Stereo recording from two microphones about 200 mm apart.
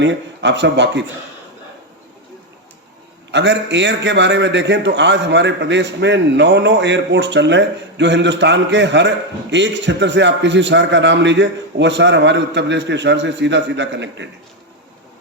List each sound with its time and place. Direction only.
0.0 s a man's voice: 65° right (ahead or behind)
3.3 s a man's voice: 60° right (ahead or behind)